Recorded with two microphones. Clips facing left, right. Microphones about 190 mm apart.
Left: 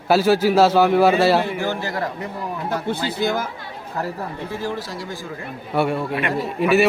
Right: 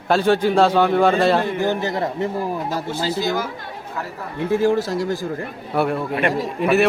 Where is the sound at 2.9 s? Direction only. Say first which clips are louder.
Even; 55° left (ahead or behind).